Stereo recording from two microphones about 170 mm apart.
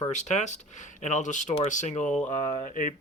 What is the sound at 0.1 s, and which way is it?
Speech, 45° left (ahead or behind).